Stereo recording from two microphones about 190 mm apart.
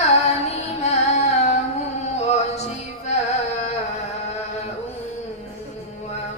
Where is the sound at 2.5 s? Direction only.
35° left (ahead or behind).